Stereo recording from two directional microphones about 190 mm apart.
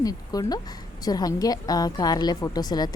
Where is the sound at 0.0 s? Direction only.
20° left (ahead or behind).